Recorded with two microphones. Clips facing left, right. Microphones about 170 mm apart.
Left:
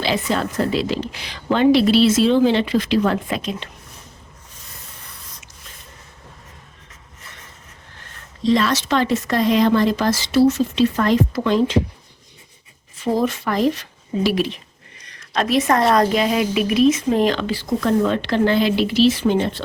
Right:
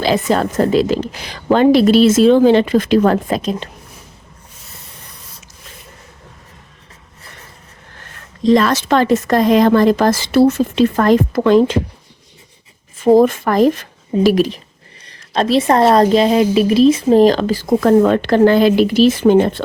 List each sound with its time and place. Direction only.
0.0 s a woman's voice: 45° right (ahead or behind)
8.4 s a woman's voice: 50° right (ahead or behind)
13.0 s a woman's voice: 50° right (ahead or behind)
15.0 s a woman's voice: 30° right (ahead or behind); by 19.6 s 50° right (ahead or behind)